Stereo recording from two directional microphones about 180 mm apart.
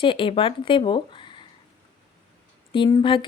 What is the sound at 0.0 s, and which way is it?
A woman's voice, 30° left (ahead or behind).